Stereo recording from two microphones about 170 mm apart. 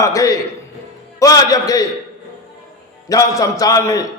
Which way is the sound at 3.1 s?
20° left (ahead or behind).